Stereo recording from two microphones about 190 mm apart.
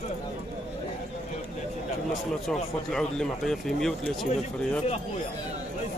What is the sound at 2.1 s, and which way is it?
Speech, centre (ahead or behind).